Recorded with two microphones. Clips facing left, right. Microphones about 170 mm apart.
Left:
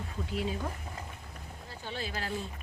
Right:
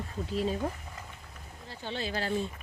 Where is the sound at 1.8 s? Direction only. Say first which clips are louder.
Right 4 dB; 30° right (ahead or behind).